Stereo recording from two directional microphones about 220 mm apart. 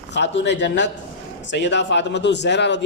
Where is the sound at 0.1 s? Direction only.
50° left (ahead or behind).